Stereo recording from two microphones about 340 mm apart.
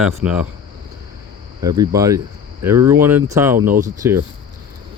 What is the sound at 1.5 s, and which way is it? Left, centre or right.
Speech, centre.